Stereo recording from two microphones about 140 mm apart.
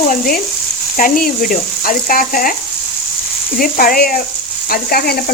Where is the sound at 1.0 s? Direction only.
80° left.